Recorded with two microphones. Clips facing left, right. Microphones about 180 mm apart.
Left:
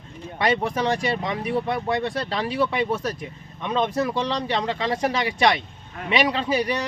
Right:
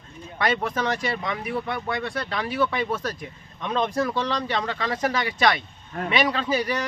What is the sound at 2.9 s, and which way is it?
A man's voice, 10° left (ahead or behind).